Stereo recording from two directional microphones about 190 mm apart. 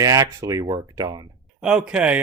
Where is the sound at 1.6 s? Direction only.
5° right (ahead or behind).